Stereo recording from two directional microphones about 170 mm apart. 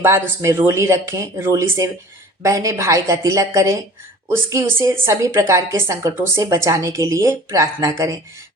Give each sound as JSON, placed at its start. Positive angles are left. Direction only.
{"t": 0.0, "sound": "a woman's voice", "side_deg": -15}